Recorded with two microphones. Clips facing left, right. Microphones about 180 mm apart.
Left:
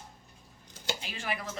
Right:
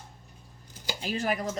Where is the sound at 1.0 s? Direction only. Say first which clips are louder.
Right 8 dB; 40° right (ahead or behind).